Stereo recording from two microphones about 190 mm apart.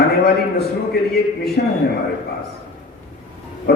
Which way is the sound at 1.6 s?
55° left (ahead or behind).